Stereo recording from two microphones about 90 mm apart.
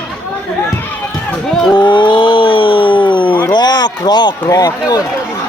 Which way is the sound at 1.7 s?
60° left (ahead or behind).